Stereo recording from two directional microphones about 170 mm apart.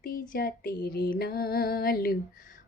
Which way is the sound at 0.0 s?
60° left (ahead or behind).